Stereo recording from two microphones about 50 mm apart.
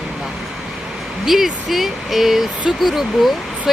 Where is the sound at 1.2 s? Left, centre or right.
Centre.